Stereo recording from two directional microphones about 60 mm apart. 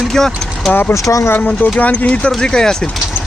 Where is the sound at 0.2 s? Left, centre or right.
Centre.